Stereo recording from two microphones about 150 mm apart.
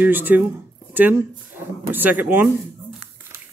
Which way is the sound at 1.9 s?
10° right (ahead or behind).